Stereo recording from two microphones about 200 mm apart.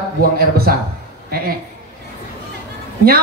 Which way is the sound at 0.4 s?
50° right (ahead or behind).